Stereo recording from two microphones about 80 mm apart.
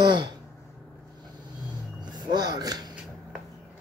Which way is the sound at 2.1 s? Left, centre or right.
Right.